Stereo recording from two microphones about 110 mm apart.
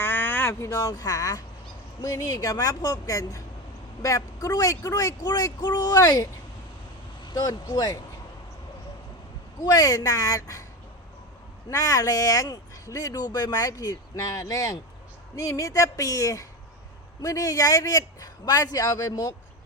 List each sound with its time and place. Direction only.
0.0 s speech: 20° left (ahead or behind)
7.3 s speech: 35° left (ahead or behind)
9.6 s speech: 30° left (ahead or behind)
11.7 s speech: 30° left (ahead or behind)